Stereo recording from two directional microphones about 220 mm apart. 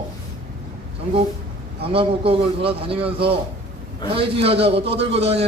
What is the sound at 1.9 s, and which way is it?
A man's voice, 25° right (ahead or behind).